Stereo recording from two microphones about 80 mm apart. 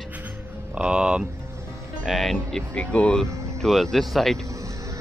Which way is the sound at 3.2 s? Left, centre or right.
Right.